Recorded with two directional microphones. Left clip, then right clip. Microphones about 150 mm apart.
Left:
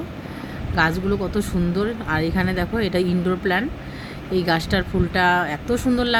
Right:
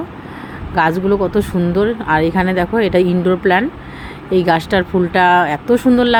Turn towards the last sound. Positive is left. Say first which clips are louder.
# right 8 dB
turn(degrees=-15)  # may be behind; listen again after turning